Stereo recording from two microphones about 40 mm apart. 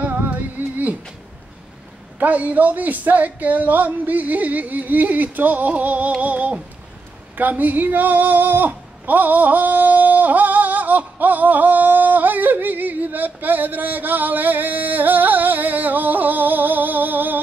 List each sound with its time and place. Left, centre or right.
0.0 s music: right
2.1 s speech: right
6.2 s a sound: right
7.3 s speech: right